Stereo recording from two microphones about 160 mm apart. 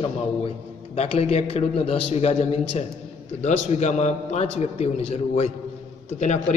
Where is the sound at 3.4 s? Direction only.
45° left (ahead or behind).